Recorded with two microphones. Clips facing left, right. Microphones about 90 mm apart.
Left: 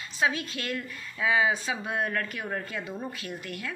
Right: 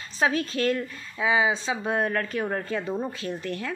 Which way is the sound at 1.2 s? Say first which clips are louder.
Right 2 dB; 20° right (ahead or behind).